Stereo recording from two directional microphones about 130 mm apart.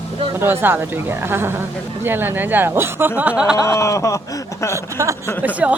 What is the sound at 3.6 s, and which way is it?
Speech, 20° left (ahead or behind).